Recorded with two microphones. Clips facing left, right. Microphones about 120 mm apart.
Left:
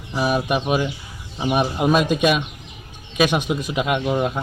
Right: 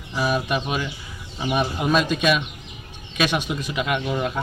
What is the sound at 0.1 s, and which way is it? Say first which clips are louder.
Speech: left 2 dB; 15° left (ahead or behind).